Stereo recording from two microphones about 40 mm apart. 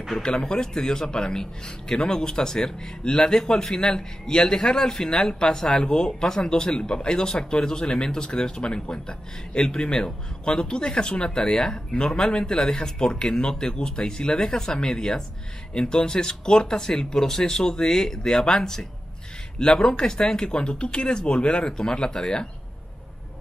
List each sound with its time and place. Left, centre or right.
0.2 s a man's voice: left